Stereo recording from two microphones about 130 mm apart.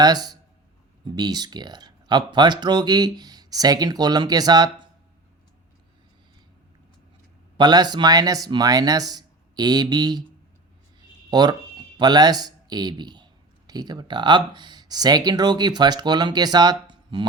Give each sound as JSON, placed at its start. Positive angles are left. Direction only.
{"t": 0.0, "sound": "speech", "side_deg": -30}
{"t": 7.5, "sound": "speech", "side_deg": -35}
{"t": 11.3, "sound": "a man's voice", "side_deg": -30}
{"t": 16.9, "sound": "a sound", "side_deg": -40}